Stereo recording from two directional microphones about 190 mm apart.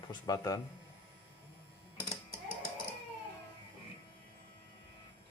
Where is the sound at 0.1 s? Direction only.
20° left (ahead or behind).